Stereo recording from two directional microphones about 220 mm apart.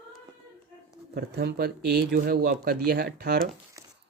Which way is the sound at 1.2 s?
45° right (ahead or behind).